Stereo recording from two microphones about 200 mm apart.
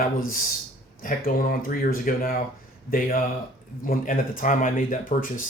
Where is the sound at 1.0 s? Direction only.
45° left (ahead or behind).